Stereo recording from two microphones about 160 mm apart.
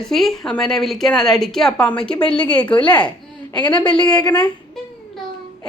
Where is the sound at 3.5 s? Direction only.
30° left (ahead or behind).